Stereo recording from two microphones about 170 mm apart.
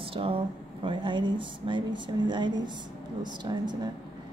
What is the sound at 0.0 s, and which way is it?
A woman's voice, 30° right (ahead or behind).